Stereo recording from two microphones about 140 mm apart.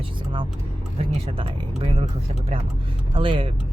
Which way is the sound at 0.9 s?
40° right (ahead or behind).